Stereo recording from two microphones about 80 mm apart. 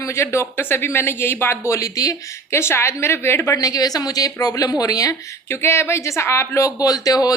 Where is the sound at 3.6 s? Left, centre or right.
Left.